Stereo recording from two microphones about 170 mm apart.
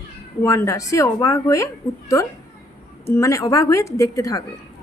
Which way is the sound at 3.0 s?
15° left (ahead or behind).